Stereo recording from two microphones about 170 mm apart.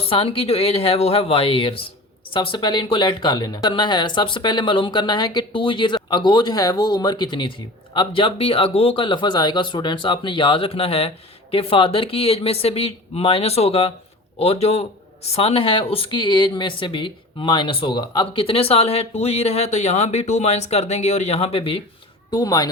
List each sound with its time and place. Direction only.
0.0 s speech: 35° left (ahead or behind)
22.3 s speech: 20° left (ahead or behind)